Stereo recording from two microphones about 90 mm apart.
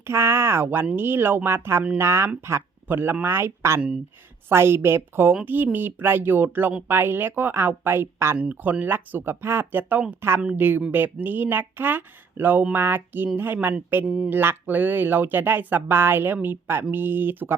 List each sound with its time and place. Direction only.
0.0 s speech: 30° right (ahead or behind)
8.4 s speech: 15° right (ahead or behind)